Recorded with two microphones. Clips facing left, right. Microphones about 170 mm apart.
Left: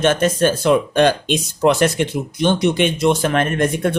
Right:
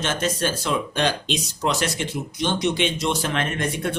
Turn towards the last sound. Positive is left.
turn(degrees=50)  # may be behind; listen again after turning